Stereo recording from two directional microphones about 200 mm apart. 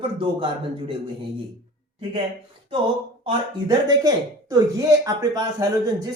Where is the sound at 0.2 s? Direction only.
25° right (ahead or behind).